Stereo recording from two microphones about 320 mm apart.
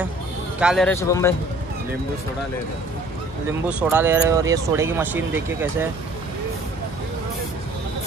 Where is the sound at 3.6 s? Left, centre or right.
Centre.